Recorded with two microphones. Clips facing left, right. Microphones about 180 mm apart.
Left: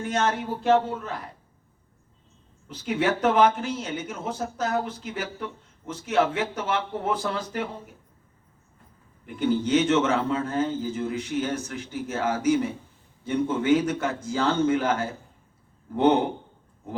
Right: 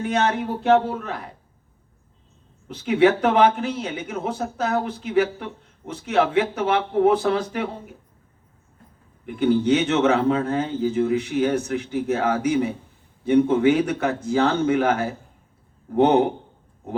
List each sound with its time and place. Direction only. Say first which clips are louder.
0.0 s speech: right 4 dB; 60° right (ahead or behind)
2.8 s speech: right 6 dB; 60° right (ahead or behind)
9.2 s speech: right 5 dB; 65° right (ahead or behind)